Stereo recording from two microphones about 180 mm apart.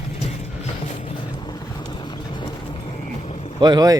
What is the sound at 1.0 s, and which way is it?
Vehicle, 25° left (ahead or behind).